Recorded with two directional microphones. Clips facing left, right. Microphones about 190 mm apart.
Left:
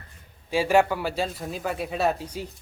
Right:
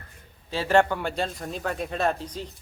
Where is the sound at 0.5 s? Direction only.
10° left (ahead or behind).